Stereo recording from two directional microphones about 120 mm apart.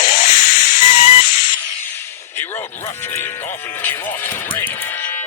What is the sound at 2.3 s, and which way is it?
Music, 15° left (ahead or behind).